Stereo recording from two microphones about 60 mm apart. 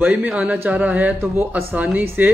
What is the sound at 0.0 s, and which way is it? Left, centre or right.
A man's voice, right.